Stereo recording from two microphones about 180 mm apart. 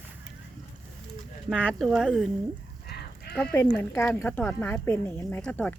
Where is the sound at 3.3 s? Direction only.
10° left (ahead or behind).